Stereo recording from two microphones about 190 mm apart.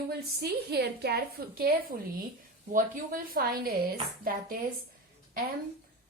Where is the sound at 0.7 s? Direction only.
55° right (ahead or behind).